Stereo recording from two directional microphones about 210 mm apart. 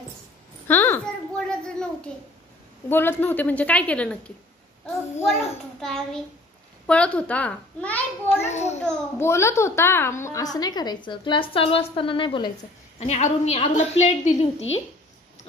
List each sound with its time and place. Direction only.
0.7 s a sound: 10° left (ahead or behind)
2.9 s a woman's voice: 10° left (ahead or behind)
8.4 s a woman's voice: 35° left (ahead or behind)
8.8 s a child's voice: 10° left (ahead or behind); by 14.8 s 30° left (ahead or behind)